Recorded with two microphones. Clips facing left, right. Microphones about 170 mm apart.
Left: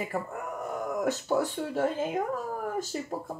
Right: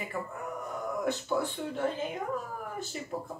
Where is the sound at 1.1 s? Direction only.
40° left (ahead or behind).